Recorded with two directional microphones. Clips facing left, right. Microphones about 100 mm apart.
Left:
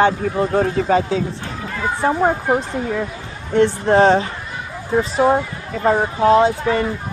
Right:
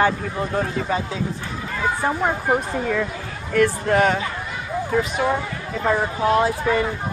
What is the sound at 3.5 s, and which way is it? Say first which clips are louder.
Speech: left 4 dB; 30° left (ahead or behind).